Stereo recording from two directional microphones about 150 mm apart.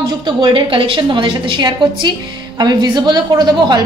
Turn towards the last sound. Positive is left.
turn(degrees=-30)  # may be behind; listen again after turning